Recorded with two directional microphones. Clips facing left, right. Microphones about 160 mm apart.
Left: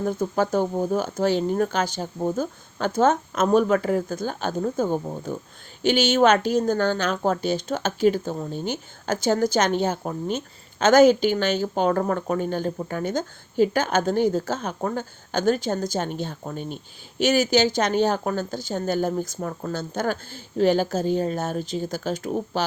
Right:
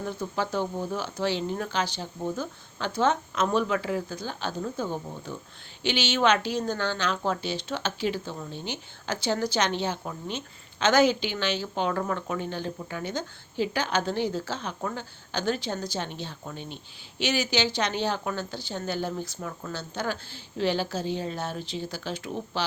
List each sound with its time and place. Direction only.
0.0 s a woman's voice: 45° left (ahead or behind)